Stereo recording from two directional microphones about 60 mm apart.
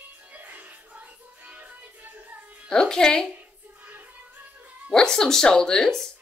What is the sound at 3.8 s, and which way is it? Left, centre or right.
Music, right.